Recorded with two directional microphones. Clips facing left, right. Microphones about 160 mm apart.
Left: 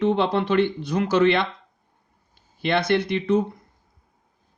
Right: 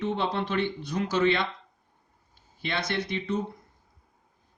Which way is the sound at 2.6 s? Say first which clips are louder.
Left 9 dB; 70° left (ahead or behind).